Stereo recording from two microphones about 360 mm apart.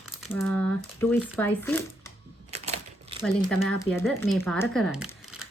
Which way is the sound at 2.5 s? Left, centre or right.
Centre.